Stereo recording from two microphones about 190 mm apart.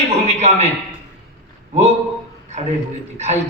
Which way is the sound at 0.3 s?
35° right (ahead or behind).